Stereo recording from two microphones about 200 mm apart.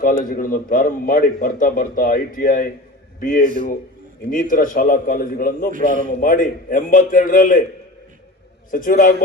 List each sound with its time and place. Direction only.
0.0 s a man's voice: 45° left (ahead or behind)
8.7 s a man's voice: 45° left (ahead or behind)